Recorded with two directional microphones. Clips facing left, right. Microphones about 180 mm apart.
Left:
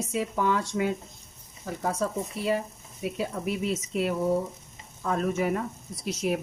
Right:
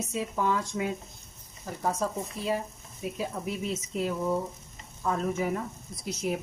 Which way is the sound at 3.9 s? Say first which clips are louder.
Left 3 dB; 80° left.